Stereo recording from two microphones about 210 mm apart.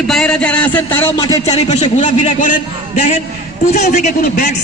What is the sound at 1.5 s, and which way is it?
Speech, 30° left (ahead or behind).